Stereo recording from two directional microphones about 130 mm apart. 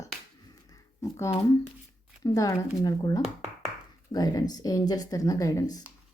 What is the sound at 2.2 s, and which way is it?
Speech, 25° left (ahead or behind).